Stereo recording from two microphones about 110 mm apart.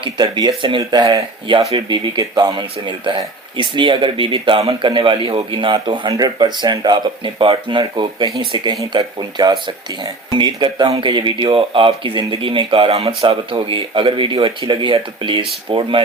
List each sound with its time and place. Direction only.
0.0 s a man's voice: 40° right (ahead or behind)
14.6 s a man's voice: 40° right (ahead or behind)